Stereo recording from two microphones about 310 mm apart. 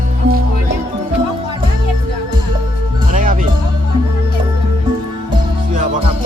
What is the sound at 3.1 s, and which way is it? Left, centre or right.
Music, right.